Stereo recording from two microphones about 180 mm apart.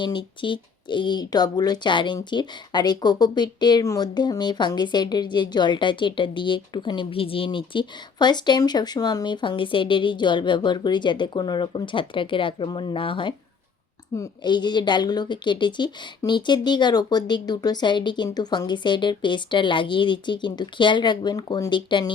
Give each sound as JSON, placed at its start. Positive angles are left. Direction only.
{"t": 0.0, "sound": "speech", "side_deg": 25}